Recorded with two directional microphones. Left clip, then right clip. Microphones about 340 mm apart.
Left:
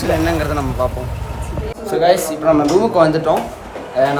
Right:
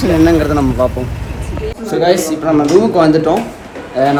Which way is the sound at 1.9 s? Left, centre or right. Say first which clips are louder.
Right 1 dB; centre.